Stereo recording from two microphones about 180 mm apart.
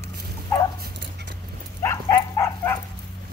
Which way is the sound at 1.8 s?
15° left (ahead or behind).